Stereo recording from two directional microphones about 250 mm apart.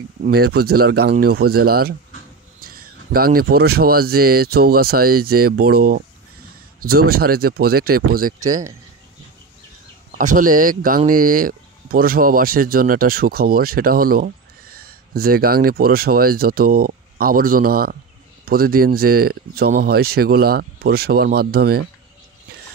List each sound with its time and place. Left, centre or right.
0.2 s speech: right
7.1 s speech: right
10.1 s speech: right